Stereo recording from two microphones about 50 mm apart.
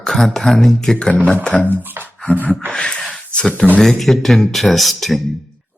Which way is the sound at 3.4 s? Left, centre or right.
Centre.